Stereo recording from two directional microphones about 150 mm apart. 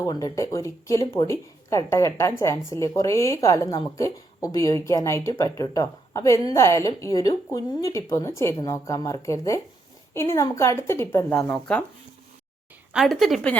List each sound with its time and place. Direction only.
0.0 s a woman's voice: 25° left (ahead or behind)
12.9 s speech: centre (ahead or behind)